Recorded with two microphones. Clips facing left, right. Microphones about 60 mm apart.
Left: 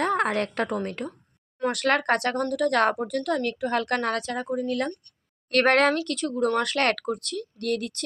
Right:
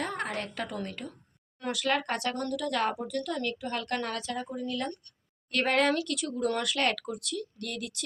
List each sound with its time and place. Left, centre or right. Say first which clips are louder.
0.0 s a woman's voice: left 9 dB; left
3.0 s a woman's voice: left 6 dB; left
6.1 s speech: left 5 dB; left